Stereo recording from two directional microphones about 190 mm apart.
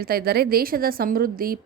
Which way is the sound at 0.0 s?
55° right (ahead or behind).